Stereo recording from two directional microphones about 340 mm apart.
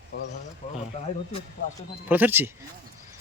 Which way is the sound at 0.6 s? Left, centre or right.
Left.